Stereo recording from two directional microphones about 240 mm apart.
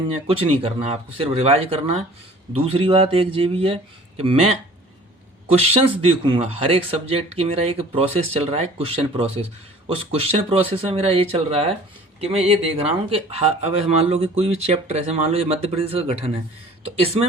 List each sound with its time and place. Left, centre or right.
0.3 s speech: right